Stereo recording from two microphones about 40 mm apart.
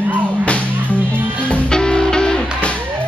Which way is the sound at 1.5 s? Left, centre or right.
Centre.